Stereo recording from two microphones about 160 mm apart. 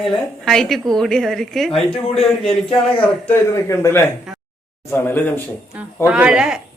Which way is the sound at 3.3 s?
15° left (ahead or behind).